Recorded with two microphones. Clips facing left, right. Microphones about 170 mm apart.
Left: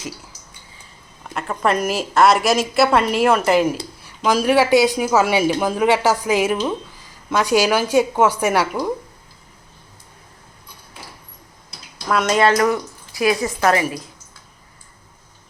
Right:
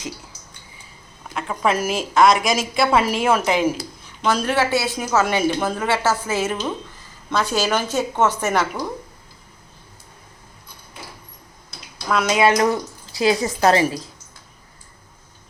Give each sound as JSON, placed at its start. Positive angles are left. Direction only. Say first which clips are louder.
{"t": 1.3, "sound": "a woman's voice", "louder": "left 1 dB", "side_deg": 0}
{"t": 12.0, "sound": "a woman's voice", "louder": "left 1 dB", "side_deg": 0}
{"t": 12.5, "sound": "a woman's voice", "louder": "left 1 dB", "side_deg": -25}